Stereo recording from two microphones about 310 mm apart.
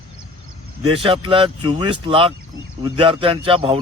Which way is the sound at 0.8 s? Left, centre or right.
Centre.